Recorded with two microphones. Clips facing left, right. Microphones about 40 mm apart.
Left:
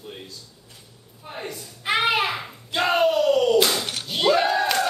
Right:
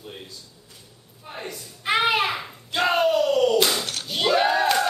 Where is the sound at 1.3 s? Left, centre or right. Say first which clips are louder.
Left 1 dB; centre.